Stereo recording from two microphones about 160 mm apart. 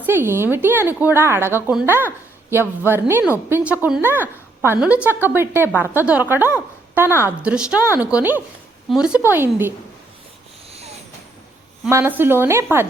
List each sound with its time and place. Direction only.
0.0 s a woman's voice: 15° right (ahead or behind)
10.7 s a sound: 40° right (ahead or behind)
11.9 s a woman's voice: 15° right (ahead or behind)